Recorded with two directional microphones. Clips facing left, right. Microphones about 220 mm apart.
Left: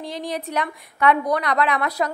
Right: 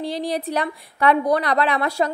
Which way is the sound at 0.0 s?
35° right (ahead or behind).